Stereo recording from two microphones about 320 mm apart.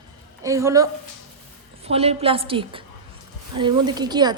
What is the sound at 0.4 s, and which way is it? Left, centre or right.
Speech, centre.